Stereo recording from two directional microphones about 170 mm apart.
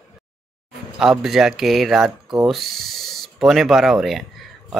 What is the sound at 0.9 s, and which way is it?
Speech, centre (ahead or behind).